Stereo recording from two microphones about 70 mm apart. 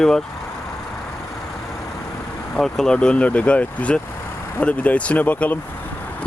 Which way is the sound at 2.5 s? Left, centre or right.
Centre.